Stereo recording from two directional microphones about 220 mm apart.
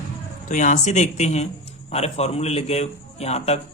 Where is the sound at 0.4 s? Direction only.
35° left (ahead or behind).